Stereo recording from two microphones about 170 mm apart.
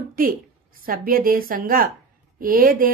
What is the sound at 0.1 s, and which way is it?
A woman's voice, 60° right (ahead or behind).